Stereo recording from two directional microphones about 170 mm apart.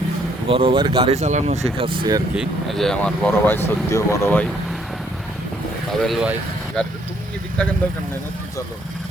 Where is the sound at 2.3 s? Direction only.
Centre (ahead or behind); by 4.4 s 15° left (ahead or behind).